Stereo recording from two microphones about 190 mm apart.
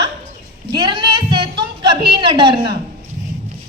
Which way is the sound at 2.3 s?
25° right (ahead or behind).